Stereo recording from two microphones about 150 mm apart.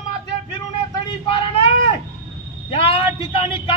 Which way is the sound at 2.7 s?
35° left (ahead or behind).